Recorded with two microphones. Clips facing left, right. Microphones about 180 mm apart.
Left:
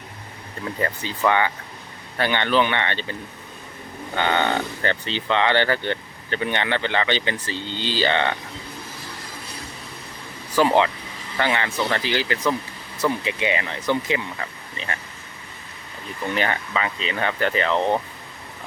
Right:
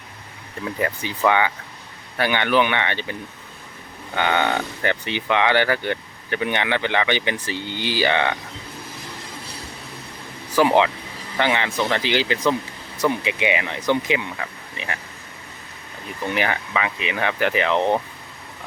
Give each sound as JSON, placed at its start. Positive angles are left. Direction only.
{"t": 0.6, "sound": "speech", "side_deg": -10}
{"t": 10.5, "sound": "speech", "side_deg": -15}
{"t": 16.3, "sound": "speech", "side_deg": -10}